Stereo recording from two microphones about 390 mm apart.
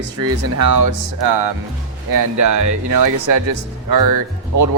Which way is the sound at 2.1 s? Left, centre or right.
Right.